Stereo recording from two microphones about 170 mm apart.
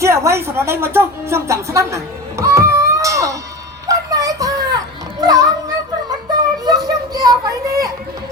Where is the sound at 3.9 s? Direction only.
20° right (ahead or behind).